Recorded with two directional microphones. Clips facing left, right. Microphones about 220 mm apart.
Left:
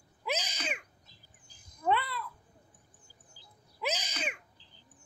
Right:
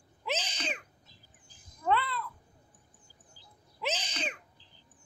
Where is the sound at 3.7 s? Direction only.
10° left (ahead or behind).